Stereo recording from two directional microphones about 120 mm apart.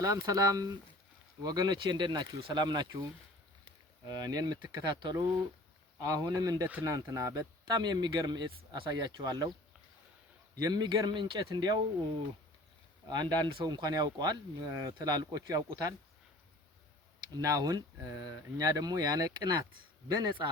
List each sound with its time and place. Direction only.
0.0 s speech: 30° right (ahead or behind)
10.6 s speech: 35° right (ahead or behind)
13.1 s speech: 35° right (ahead or behind)
17.3 s speech: 30° right (ahead or behind)